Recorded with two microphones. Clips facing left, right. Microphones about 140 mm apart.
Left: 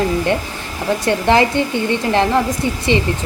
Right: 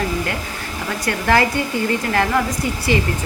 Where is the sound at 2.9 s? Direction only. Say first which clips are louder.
Left 2 dB; 25° left (ahead or behind).